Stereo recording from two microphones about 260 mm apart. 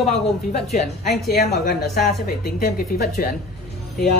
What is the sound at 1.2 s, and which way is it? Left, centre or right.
A woman's voice, left.